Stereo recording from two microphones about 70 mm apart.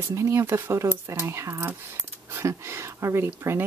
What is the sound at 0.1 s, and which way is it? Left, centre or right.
Speech, right.